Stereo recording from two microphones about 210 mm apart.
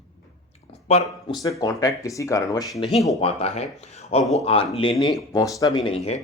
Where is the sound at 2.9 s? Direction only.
Centre (ahead or behind).